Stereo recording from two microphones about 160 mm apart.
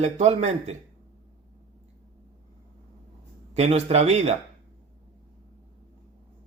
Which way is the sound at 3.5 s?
40° right (ahead or behind).